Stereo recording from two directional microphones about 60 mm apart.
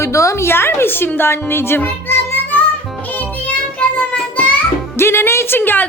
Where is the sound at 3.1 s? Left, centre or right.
Left.